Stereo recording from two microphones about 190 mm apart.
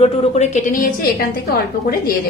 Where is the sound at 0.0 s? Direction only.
30° left (ahead or behind); by 2.1 s 50° left (ahead or behind).